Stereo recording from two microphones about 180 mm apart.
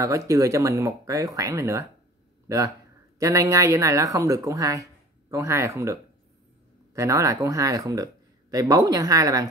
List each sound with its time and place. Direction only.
0.0 s speech: 15° right (ahead or behind)